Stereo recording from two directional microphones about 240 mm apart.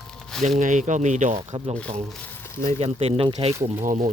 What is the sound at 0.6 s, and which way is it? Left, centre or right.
Speech, right.